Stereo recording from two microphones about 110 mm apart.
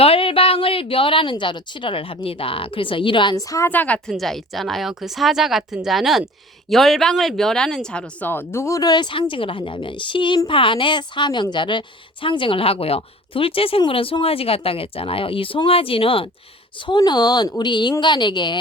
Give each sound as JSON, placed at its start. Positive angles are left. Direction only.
{"t": 0.0, "sound": "a woman's voice", "side_deg": 60}
{"t": 3.3, "sound": "speech", "side_deg": 30}
{"t": 3.7, "sound": "a woman's voice", "side_deg": 15}
{"t": 4.1, "sound": "a woman's voice", "side_deg": 0}
{"t": 16.8, "sound": "a woman's voice", "side_deg": 40}